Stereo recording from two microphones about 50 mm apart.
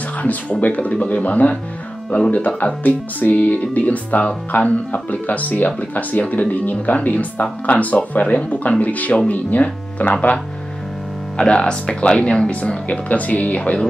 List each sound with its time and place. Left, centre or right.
0.2 s speech: left
2.0 s speech: centre
2.3 s speech: left
11.3 s speech: centre